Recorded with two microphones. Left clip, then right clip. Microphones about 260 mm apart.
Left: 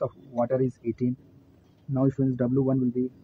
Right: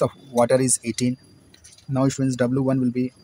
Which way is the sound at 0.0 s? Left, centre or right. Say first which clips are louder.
Right 8 dB; right.